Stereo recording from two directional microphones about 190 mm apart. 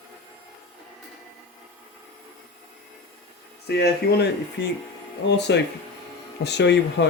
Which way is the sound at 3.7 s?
60° left (ahead or behind).